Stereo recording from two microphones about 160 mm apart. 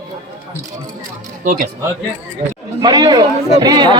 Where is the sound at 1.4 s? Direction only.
55° right (ahead or behind).